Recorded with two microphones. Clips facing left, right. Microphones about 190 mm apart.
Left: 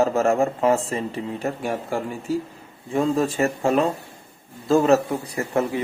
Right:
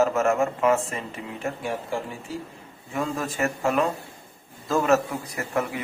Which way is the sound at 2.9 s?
30° left (ahead or behind).